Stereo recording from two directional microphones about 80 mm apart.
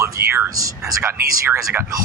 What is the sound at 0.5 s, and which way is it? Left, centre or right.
Speech, right.